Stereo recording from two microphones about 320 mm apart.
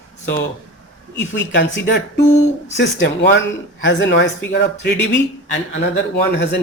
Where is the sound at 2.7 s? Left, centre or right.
Left.